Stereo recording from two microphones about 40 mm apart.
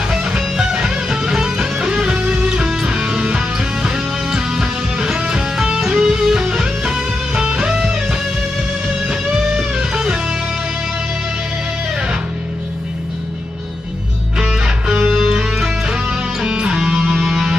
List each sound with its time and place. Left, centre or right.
0.1 s music: centre
9.8 s music: right
14.4 s music: centre
15.0 s music: centre
16.4 s music: right
16.7 s music: centre